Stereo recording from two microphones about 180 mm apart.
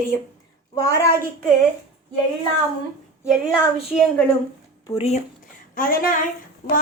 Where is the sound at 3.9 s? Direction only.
5° left (ahead or behind).